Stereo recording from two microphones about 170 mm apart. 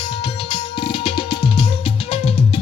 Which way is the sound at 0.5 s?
30° left (ahead or behind).